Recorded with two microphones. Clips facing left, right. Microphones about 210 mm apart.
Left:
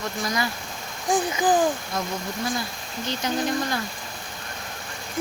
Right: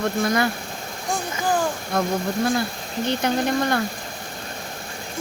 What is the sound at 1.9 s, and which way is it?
Speech, 55° right (ahead or behind).